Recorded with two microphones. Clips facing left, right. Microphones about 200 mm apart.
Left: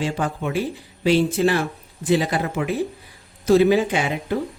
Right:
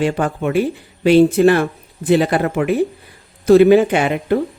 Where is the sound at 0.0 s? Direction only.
60° right (ahead or behind).